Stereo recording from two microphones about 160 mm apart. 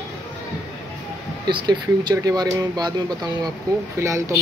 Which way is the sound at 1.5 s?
25° right (ahead or behind).